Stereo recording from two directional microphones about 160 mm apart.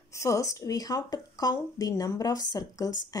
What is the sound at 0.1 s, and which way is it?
Speech, 20° left (ahead or behind).